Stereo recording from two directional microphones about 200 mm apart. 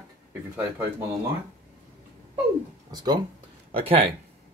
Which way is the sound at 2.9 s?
20° right (ahead or behind).